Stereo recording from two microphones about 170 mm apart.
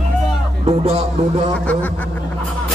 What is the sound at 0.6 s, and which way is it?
Music, 35° right (ahead or behind).